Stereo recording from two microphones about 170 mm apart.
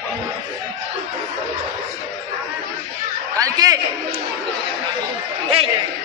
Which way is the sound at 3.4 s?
20° right (ahead or behind).